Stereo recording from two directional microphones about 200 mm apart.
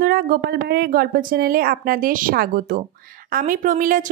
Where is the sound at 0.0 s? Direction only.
45° right (ahead or behind).